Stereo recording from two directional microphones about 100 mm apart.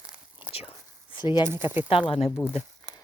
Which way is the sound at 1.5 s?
20° right (ahead or behind).